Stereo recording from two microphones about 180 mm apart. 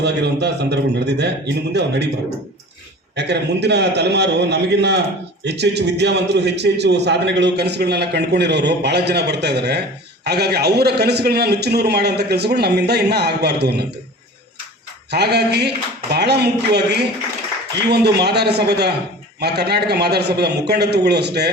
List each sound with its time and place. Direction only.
0.0 s a man's voice: 70° right (ahead or behind)
3.2 s a man's voice: 70° right (ahead or behind)
15.1 s a man's voice: 65° right (ahead or behind)